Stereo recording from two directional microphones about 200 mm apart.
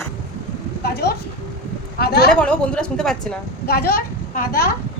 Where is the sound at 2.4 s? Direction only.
5° left (ahead or behind).